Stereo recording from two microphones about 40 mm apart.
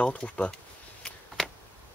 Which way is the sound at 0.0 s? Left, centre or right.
Left.